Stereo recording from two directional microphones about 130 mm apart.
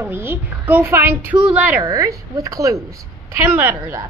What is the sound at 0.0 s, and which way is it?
A child's voice, 15° right (ahead or behind).